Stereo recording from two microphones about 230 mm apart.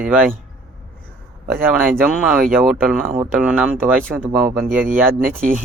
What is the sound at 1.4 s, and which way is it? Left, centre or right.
A man's voice, centre.